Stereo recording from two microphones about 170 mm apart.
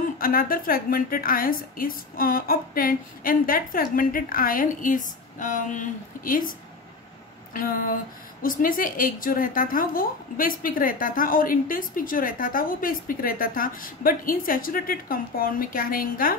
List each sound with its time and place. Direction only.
0.0 s a woman's voice: 55° left (ahead or behind)
7.5 s a woman's voice: 55° left (ahead or behind)